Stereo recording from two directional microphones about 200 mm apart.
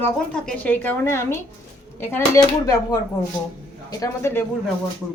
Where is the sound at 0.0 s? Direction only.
5° left (ahead or behind).